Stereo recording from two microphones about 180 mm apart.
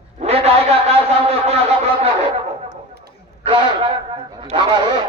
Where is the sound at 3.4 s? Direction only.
30° right (ahead or behind).